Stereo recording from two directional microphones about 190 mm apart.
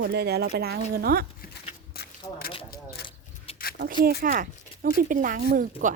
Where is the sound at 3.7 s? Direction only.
50° right (ahead or behind).